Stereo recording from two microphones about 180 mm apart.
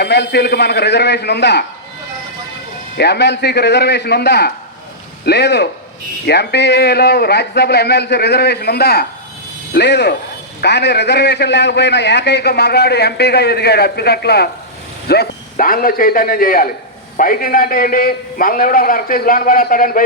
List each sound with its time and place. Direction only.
0.0 s a man's voice: 70° left (ahead or behind)
3.0 s a man's voice: 70° left (ahead or behind); by 20.1 s 50° left (ahead or behind)